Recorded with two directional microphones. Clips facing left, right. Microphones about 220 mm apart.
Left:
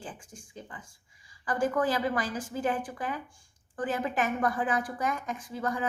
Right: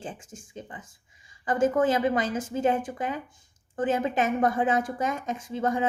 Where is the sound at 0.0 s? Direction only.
25° right (ahead or behind).